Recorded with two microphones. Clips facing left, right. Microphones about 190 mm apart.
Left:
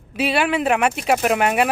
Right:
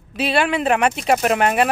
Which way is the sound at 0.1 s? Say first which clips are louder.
Even; 10° left (ahead or behind).